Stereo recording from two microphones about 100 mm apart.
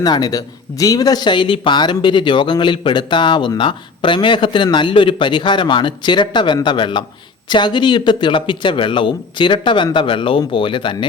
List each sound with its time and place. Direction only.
0.0 s speech: 45° left (ahead or behind)